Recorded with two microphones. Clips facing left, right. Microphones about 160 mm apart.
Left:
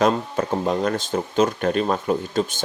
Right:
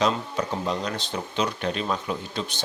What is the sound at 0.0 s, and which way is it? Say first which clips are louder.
Speech: left 5 dB; 50° left (ahead or behind).